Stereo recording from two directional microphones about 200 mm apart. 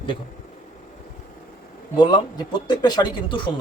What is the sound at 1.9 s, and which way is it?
Speech, 20° left (ahead or behind).